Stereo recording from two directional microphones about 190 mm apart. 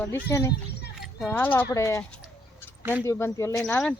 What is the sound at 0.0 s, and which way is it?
Speech, 15° left (ahead or behind).